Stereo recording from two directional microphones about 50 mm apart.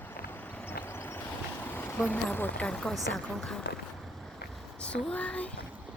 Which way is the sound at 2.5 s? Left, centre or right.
Left.